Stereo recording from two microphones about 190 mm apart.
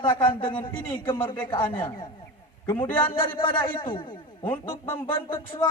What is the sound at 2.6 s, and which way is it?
Music, 10° left (ahead or behind).